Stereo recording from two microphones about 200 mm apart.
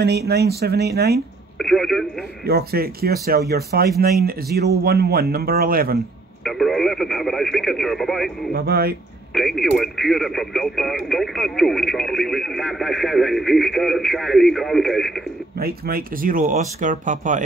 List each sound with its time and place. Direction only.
0.3 s speech: 55° right (ahead or behind)
1.6 s telephone: centre (ahead or behind)
2.4 s speech: 50° right (ahead or behind)
6.4 s speech: centre (ahead or behind)
8.5 s speech: 50° right (ahead or behind)
9.3 s speech: centre (ahead or behind)
15.5 s speech: 50° right (ahead or behind)